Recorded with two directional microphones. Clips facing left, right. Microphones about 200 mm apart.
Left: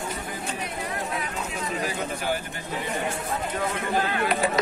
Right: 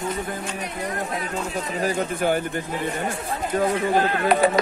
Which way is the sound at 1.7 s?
45° right (ahead or behind).